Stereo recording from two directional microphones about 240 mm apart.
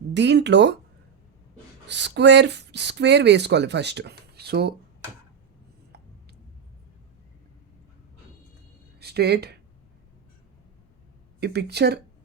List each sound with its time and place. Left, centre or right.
0.1 s speech: right
1.9 s speech: right
9.0 s speech: right
11.3 s speech: right